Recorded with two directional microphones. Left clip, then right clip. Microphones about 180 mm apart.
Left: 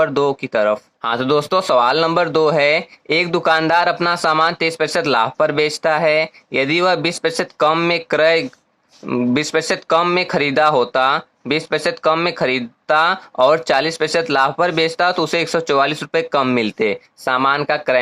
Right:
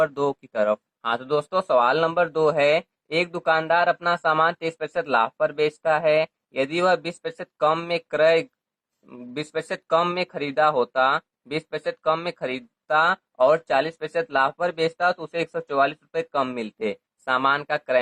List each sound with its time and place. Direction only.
0.0 s speech: 25° left (ahead or behind)